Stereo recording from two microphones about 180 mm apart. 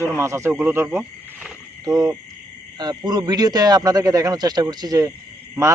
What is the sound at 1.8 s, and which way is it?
A man's voice, 20° right (ahead or behind).